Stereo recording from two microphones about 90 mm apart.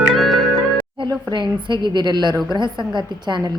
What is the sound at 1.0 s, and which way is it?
A woman's voice, 60° right (ahead or behind).